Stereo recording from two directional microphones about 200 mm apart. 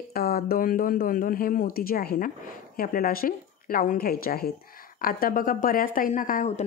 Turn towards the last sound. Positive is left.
turn(degrees=35)  # may be behind; listen again after turning